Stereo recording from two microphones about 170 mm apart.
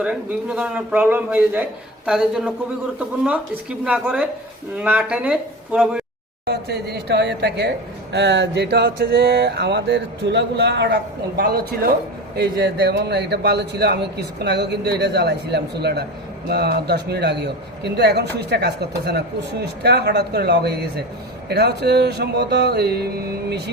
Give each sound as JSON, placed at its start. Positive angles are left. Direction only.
{"t": 0.0, "sound": "a man's voice", "side_deg": -5}
{"t": 6.4, "sound": "a man's voice", "side_deg": -75}
{"t": 8.1, "sound": "a sound", "side_deg": -90}
{"t": 11.3, "sound": "a man's voice", "side_deg": -65}